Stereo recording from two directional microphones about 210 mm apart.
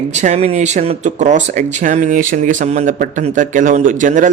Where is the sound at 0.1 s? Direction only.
35° right (ahead or behind).